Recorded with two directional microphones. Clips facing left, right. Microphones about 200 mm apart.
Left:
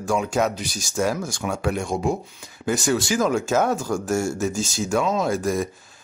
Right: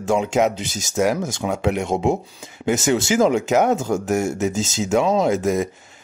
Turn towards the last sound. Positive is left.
turn(degrees=-20)  # may be behind; listen again after turning